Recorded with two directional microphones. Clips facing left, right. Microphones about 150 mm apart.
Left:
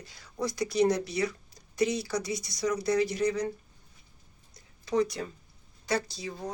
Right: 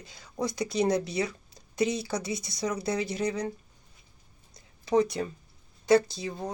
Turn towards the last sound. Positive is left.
turn(degrees=-25)  # may be behind; listen again after turning